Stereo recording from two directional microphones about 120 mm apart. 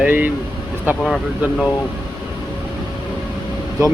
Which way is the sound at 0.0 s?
15° right (ahead or behind).